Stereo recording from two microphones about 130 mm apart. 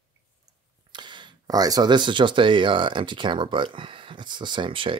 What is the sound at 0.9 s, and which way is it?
Speech, 35° right (ahead or behind).